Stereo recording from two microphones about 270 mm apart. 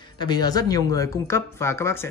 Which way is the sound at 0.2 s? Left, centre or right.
Centre.